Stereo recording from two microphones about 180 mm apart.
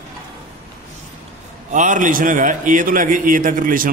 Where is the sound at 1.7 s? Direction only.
45° right (ahead or behind).